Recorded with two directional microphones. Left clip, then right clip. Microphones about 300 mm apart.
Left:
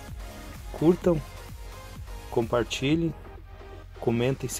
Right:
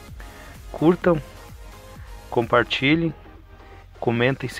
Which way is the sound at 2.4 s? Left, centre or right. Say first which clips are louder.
Right 7 dB; centre.